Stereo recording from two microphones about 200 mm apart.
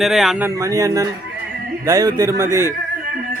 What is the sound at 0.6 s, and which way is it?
Speech, 15° right (ahead or behind).